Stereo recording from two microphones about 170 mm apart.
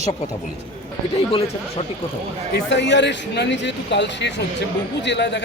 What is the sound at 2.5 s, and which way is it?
Speech, 90° left.